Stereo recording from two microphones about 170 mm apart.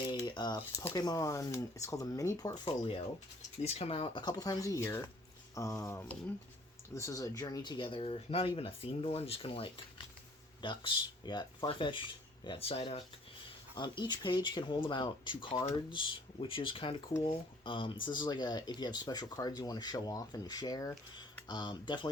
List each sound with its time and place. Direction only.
0.1 s a sound: 25° left (ahead or behind)
0.6 s speech: 15° left (ahead or behind)
2.6 s speech: 30° left (ahead or behind)